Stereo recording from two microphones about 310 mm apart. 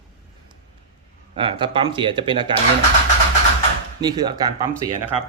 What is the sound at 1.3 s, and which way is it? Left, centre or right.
Speech, centre.